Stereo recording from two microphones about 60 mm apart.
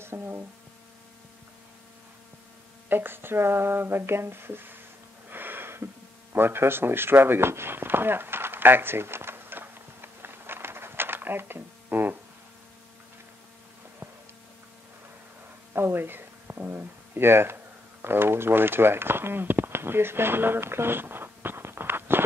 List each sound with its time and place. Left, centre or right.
0.0 s speech: right
2.9 s speech: right
5.3 s wheeze: right
6.3 s a sound: right
15.7 s speech: right